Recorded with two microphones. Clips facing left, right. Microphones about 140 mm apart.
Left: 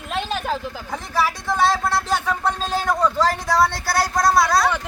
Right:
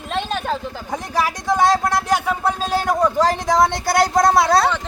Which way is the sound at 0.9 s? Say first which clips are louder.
Right 1 dB; 15° right (ahead or behind).